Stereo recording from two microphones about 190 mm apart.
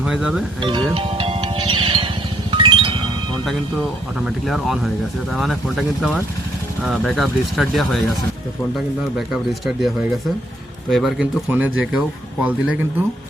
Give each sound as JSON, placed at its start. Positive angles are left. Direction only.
{"t": 0.0, "sound": "speech", "side_deg": -5}
{"t": 0.6, "sound": "music", "side_deg": -25}
{"t": 4.3, "sound": "speech", "side_deg": 0}
{"t": 9.1, "sound": "speech", "side_deg": 0}